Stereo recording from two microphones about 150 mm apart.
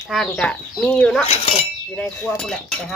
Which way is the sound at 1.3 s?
45° left (ahead or behind).